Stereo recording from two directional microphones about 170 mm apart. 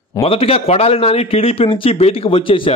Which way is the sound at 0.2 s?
35° left (ahead or behind).